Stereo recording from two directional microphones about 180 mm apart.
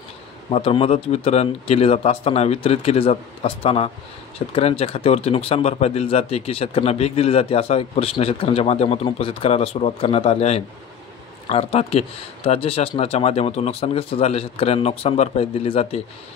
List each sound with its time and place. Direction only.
0.5 s speech: 30° left (ahead or behind)